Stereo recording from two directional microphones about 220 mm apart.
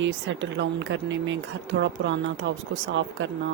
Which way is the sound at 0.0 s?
55° right (ahead or behind).